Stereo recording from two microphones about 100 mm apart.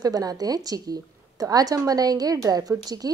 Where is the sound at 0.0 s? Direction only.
40° right (ahead or behind).